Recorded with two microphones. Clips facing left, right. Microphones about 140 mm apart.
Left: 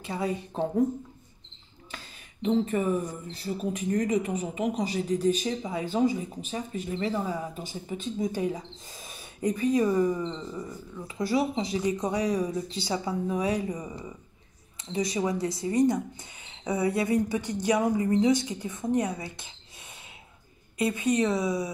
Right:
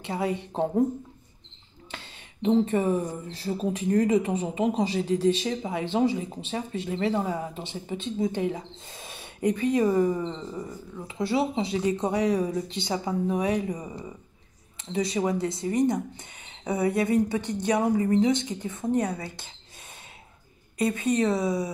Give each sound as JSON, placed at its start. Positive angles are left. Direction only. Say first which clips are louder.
{"t": 0.0, "sound": "speech", "louder": "right 2 dB", "side_deg": -25}
{"t": 1.9, "sound": "a sound", "louder": "right 2 dB", "side_deg": -25}
{"t": 2.6, "sound": "speech", "louder": "right 2 dB", "side_deg": -30}
{"t": 6.7, "sound": "speech", "louder": "right 3 dB", "side_deg": -80}
{"t": 7.2, "sound": "speech", "louder": "right 2 dB", "side_deg": -25}
{"t": 15.0, "sound": "speech", "louder": "right 2 dB", "side_deg": -30}
{"t": 21.0, "sound": "speech", "louder": "right 1 dB", "side_deg": -25}